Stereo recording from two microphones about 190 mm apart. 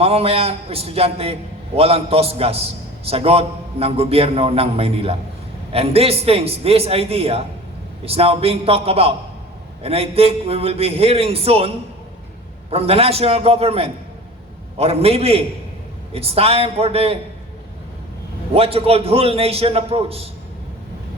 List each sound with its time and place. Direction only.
0.0 s a man's voice: 30° right (ahead or behind)
12.7 s a man's voice: 30° right (ahead or behind)
18.5 s a man's voice: 30° right (ahead or behind)